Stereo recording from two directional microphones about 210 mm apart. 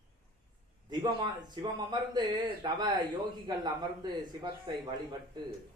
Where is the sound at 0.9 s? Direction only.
20° right (ahead or behind).